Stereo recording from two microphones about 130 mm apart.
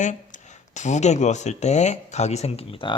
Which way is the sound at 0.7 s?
65° left (ahead or behind).